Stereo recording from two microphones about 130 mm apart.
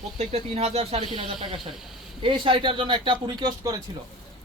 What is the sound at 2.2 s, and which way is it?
A man's voice, 40° right (ahead or behind).